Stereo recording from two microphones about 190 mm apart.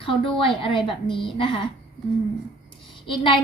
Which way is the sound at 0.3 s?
25° left (ahead or behind).